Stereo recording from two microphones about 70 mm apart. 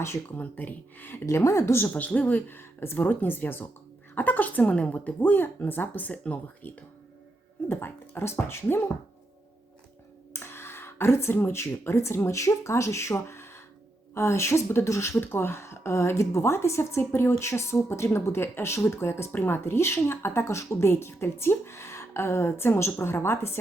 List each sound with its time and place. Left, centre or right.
0.0 s speech: left
0.3 s speech: left
1.8 s speech: left
10.3 s speech: left